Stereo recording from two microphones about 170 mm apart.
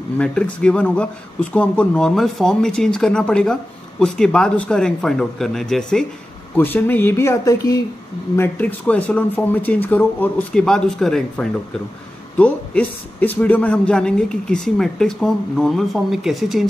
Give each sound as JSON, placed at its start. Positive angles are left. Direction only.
{"t": 0.2, "sound": "speech", "side_deg": 5}
{"t": 8.4, "sound": "speech", "side_deg": 10}